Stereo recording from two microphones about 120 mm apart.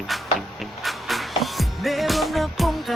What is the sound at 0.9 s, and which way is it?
Music, centre (ahead or behind).